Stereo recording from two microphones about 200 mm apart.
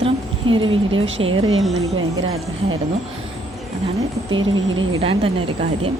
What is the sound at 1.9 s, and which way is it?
Speech, 90° right.